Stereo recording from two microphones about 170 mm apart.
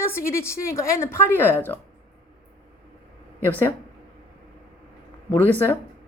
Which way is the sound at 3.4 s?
10° left (ahead or behind).